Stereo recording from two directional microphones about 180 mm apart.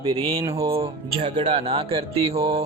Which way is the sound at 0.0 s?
30° right (ahead or behind).